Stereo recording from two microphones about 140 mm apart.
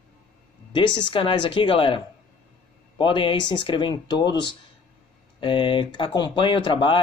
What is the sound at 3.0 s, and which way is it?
Speech, 35° left (ahead or behind).